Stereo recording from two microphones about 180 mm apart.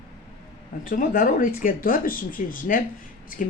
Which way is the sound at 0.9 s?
55° left (ahead or behind).